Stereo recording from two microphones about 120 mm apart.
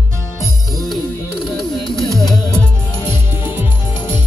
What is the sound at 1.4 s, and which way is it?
Music, centre (ahead or behind).